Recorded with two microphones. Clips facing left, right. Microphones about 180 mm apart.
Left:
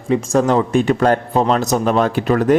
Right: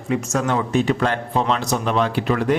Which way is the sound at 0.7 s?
50° left (ahead or behind).